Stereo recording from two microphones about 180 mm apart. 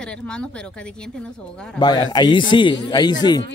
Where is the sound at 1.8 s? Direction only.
25° left (ahead or behind).